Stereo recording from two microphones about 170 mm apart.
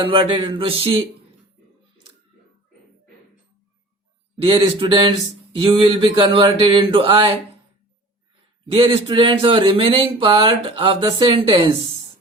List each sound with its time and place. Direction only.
0.0 s speech: 30° right (ahead or behind)
4.4 s speech: 35° right (ahead or behind)
8.6 s speech: 35° right (ahead or behind)